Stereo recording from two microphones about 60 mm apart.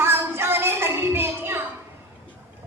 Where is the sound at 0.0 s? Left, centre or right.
Right.